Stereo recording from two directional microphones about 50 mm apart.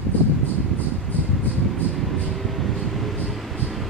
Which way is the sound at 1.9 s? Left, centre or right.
Centre.